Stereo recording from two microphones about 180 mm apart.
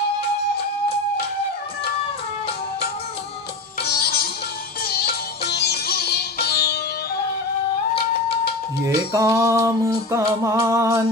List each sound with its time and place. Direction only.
3.8 s music: 60° left (ahead or behind)
8.8 s music: 15° right (ahead or behind)